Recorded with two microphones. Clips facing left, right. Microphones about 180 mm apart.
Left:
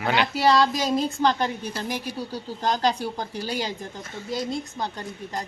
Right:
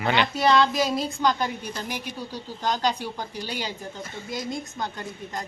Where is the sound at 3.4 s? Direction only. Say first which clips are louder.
Left 4 dB; 40° left (ahead or behind).